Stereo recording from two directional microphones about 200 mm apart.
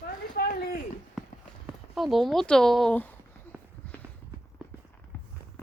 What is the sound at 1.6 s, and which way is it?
Speech, centre (ahead or behind).